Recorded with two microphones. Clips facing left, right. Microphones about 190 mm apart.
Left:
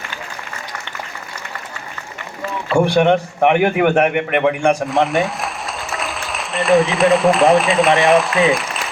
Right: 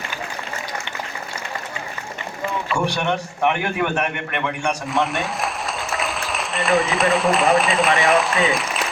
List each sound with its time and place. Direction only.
2.7 s a man's voice: 55° left (ahead or behind)
4.9 s speech: centre (ahead or behind)